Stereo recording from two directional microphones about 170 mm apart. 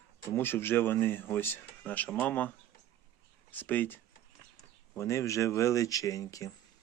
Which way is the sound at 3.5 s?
10° left (ahead or behind).